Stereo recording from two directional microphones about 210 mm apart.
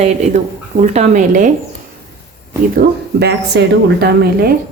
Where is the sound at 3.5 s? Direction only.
55° right (ahead or behind).